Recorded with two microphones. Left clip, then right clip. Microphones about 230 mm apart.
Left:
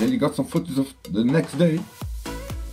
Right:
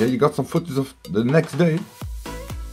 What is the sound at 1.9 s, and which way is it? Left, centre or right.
Music, centre.